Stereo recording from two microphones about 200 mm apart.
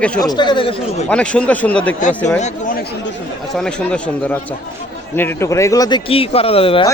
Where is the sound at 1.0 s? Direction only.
5° left (ahead or behind).